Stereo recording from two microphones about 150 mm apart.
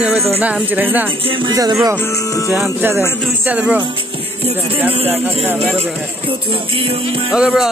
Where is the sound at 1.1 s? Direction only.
35° right (ahead or behind).